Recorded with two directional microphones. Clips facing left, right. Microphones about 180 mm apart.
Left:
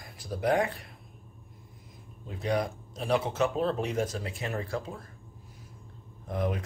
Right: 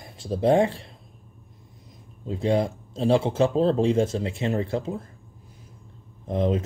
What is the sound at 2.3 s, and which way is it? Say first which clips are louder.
Speech: right 6 dB; 25° right (ahead or behind).